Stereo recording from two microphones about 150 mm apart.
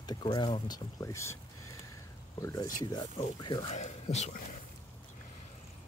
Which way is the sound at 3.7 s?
45° left (ahead or behind).